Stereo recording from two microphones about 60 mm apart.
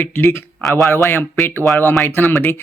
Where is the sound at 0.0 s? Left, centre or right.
Left.